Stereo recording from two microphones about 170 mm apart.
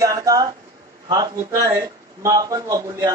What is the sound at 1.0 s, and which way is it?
Speech, 20° right (ahead or behind).